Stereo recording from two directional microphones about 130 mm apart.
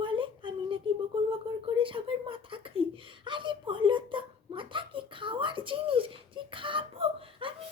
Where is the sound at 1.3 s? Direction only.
45° right (ahead or behind).